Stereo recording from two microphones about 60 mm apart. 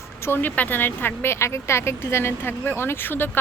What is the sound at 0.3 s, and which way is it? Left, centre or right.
Speech, left.